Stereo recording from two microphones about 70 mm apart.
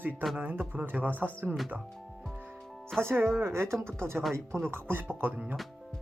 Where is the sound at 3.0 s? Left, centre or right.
Right.